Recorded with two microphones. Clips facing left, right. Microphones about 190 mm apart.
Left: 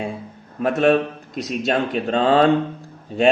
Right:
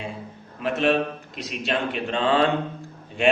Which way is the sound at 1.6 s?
40° left (ahead or behind).